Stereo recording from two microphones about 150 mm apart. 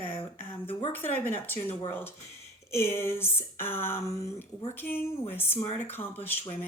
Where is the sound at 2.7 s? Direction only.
15° left (ahead or behind).